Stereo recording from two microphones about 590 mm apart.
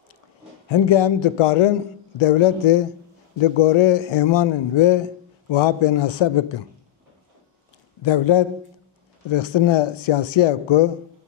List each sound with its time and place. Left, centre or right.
0.7 s a man's voice: left
8.0 s speech: left